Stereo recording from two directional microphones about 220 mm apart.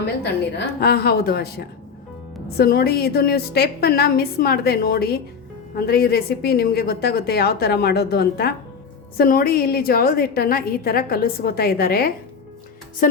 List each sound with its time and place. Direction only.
0.8 s a woman's voice: 45° left (ahead or behind)